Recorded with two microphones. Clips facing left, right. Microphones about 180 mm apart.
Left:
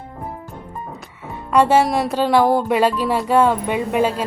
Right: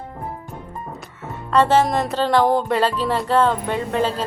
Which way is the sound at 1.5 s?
10° left (ahead or behind).